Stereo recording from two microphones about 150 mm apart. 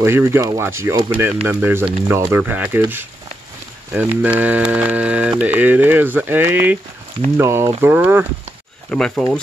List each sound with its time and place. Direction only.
0.0 s speech: 15° right (ahead or behind)
8.9 s speech: 5° left (ahead or behind)